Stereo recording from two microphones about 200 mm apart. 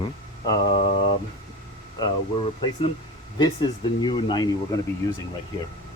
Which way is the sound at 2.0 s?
25° left (ahead or behind).